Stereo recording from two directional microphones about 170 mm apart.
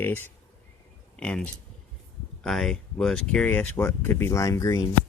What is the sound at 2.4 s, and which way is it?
Speech, centre (ahead or behind).